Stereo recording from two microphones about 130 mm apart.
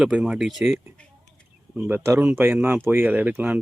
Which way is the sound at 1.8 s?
20° right (ahead or behind).